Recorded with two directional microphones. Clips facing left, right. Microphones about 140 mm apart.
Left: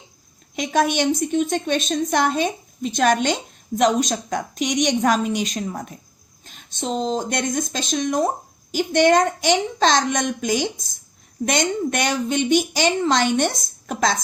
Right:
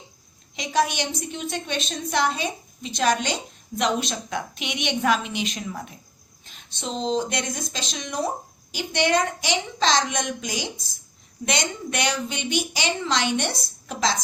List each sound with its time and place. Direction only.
0.5 s a woman's voice: 50° left (ahead or behind)